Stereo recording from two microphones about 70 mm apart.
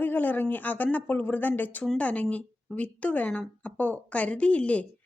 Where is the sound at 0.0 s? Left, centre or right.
Left.